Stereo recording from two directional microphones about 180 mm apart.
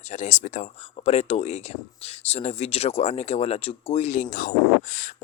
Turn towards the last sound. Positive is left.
turn(degrees=45)  # may be behind; listen again after turning